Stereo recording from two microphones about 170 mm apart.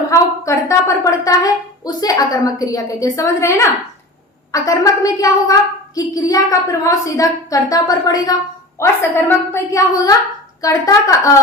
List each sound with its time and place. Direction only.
0.1 s a woman's voice: 15° left (ahead or behind)